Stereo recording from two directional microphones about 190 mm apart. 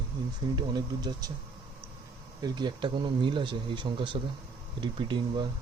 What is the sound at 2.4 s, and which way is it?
Speech, 20° right (ahead or behind).